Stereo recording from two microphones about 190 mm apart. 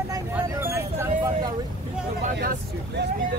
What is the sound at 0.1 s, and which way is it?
Vehicle, 10° right (ahead or behind).